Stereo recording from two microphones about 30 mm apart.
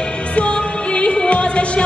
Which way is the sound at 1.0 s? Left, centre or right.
Left.